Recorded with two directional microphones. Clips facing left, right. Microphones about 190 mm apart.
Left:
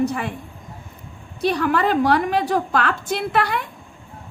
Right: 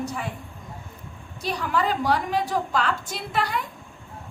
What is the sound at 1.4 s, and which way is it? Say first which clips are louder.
A woman's voice: left 6 dB; 65° left (ahead or behind).